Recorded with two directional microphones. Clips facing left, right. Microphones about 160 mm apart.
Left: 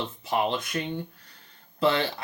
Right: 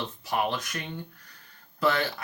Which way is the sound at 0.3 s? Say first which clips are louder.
Left 2 dB; 25° left (ahead or behind).